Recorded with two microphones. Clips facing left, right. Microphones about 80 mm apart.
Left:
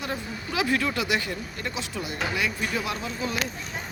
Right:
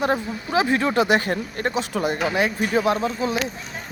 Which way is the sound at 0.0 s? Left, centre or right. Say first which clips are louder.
Right 9 dB; right.